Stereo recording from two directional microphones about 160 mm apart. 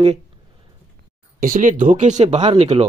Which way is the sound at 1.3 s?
55° right (ahead or behind).